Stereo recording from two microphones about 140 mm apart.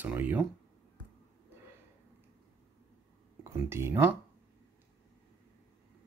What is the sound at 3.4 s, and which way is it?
Speech, 20° right (ahead or behind).